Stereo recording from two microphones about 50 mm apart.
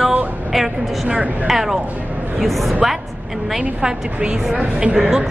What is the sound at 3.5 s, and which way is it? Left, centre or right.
A woman's voice, centre.